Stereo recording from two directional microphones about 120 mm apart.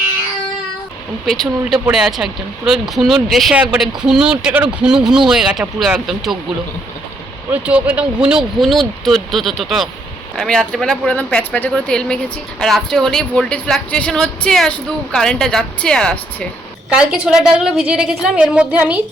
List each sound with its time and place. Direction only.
1.3 s a woman's voice: centre (ahead or behind)
7.5 s a woman's voice: 10° right (ahead or behind)
9.0 s speech: centre (ahead or behind)
16.9 s a woman's voice: 5° right (ahead or behind)